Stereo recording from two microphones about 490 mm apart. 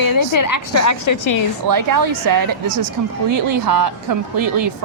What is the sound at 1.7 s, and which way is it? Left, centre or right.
A woman's voice, right.